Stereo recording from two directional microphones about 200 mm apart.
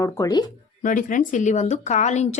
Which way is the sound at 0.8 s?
40° left (ahead or behind).